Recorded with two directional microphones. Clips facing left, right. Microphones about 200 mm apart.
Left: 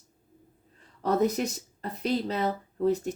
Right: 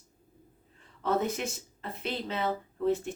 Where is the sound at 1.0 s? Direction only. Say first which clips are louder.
Left 4 dB; 40° left (ahead or behind).